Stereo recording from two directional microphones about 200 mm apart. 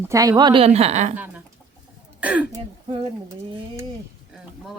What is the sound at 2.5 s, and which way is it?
Speech, 25° right (ahead or behind).